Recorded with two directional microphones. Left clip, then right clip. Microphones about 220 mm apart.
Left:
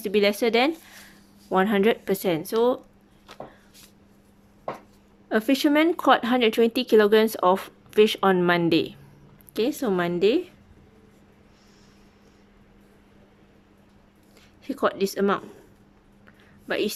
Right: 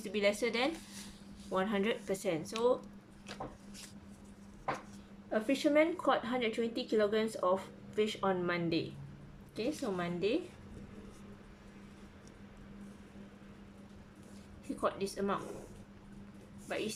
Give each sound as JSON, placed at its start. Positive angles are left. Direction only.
{"t": 0.0, "sound": "speech", "side_deg": 40}
{"t": 5.3, "sound": "speech", "side_deg": 45}
{"t": 14.8, "sound": "speech", "side_deg": 45}
{"t": 16.6, "sound": "a woman's voice", "side_deg": 45}